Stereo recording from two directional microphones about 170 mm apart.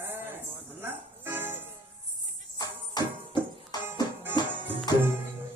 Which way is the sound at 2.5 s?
25° left (ahead or behind).